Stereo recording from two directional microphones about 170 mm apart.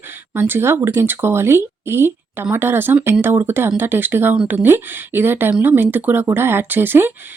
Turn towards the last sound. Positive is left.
turn(degrees=-10)  # may be behind; listen again after turning